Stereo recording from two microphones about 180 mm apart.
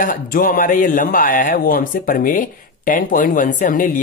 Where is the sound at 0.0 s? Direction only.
50° left (ahead or behind).